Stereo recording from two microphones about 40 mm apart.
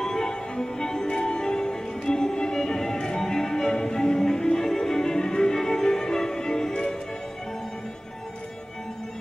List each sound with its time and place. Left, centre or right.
0.0 s music: centre